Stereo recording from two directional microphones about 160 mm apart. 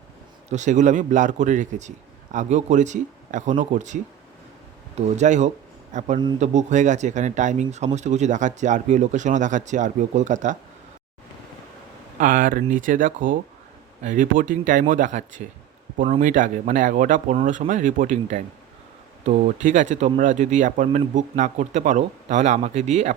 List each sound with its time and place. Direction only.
0.5 s speech: 50° right (ahead or behind)
12.2 s speech: 60° right (ahead or behind)